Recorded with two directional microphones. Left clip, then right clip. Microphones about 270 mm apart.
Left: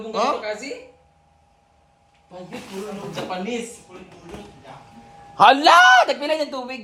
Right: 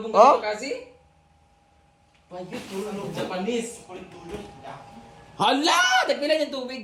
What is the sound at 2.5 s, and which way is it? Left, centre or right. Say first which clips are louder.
Speech: even; centre.